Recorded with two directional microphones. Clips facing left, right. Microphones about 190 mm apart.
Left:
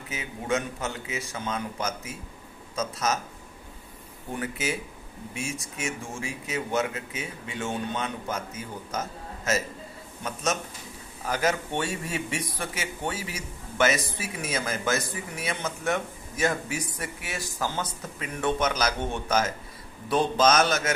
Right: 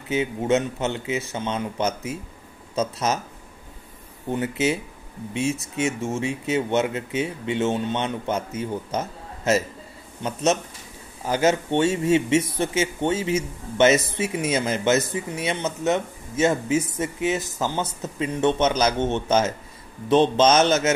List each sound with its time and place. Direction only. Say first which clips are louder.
0.1 s a man's voice: right 8 dB; 25° right (ahead or behind)
4.3 s a man's voice: right 8 dB; 25° right (ahead or behind)